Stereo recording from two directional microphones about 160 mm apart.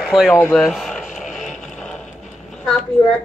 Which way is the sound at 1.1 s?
5° right (ahead or behind).